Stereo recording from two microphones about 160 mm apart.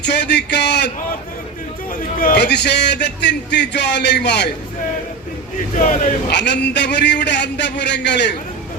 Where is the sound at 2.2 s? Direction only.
75° left (ahead or behind).